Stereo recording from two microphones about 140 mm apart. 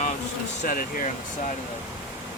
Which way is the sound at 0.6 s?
85° left.